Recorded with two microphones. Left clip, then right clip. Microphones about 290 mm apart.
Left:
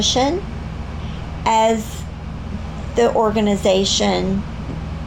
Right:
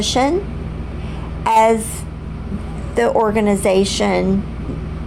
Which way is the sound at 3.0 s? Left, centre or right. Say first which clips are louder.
Right 1 dB; right.